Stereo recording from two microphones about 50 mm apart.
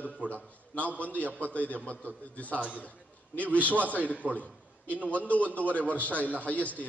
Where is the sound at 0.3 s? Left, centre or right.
Left.